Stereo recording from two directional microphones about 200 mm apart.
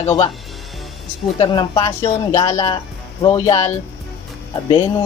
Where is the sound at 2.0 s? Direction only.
30° left (ahead or behind).